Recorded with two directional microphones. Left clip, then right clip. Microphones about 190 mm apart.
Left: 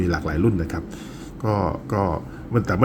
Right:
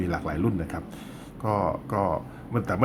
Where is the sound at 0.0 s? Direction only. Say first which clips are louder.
Left 6 dB; 5° left (ahead or behind).